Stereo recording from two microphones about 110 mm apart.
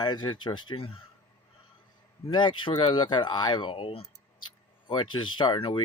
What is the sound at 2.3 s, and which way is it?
Speech, 45° left (ahead or behind).